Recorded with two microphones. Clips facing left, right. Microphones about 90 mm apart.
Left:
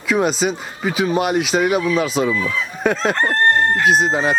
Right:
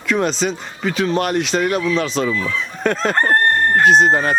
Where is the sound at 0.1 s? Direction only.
5° left (ahead or behind).